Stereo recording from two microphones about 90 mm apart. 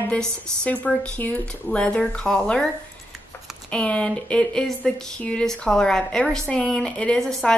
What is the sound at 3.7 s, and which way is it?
A woman's voice, 15° left (ahead or behind).